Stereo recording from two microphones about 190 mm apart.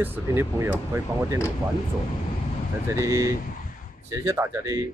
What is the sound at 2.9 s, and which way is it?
Speech, 15° right (ahead or behind).